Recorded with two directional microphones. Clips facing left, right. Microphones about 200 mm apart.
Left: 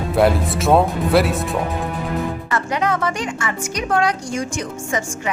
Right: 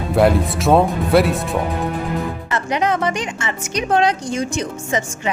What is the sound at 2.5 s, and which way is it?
Speech, 20° right (ahead or behind).